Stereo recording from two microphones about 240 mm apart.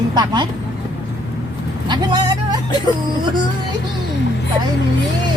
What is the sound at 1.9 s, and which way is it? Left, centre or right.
Speech, centre.